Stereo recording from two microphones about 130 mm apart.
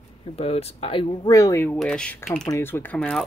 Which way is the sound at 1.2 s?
25° left (ahead or behind).